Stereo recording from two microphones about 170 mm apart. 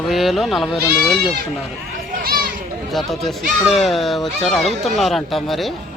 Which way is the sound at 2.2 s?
60° right (ahead or behind).